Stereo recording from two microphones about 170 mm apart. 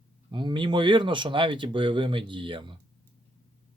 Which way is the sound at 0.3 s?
30° right (ahead or behind).